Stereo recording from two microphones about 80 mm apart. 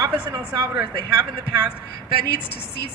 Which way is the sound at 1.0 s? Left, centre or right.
Right.